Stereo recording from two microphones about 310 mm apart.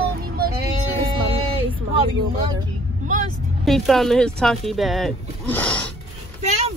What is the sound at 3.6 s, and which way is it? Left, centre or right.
Speech, centre.